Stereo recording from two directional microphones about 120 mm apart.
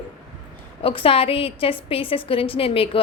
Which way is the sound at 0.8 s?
50° left (ahead or behind).